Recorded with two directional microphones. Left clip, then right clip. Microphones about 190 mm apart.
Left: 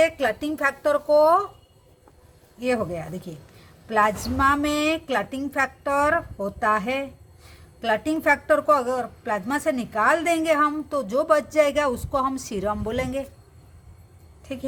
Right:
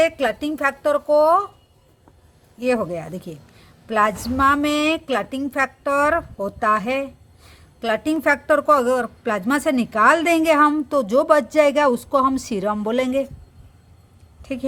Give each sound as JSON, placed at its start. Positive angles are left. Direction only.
{"t": 0.0, "sound": "a woman's voice", "side_deg": -30}
{"t": 2.6, "sound": "a woman's voice", "side_deg": -35}
{"t": 14.4, "sound": "speech", "side_deg": -30}